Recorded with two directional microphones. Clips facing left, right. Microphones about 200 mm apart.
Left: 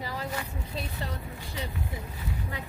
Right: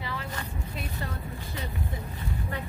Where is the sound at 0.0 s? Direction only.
40° left (ahead or behind).